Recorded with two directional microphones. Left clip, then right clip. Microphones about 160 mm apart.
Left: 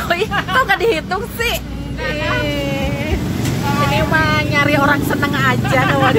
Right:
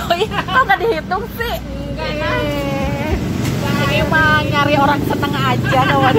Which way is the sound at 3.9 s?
20° left (ahead or behind).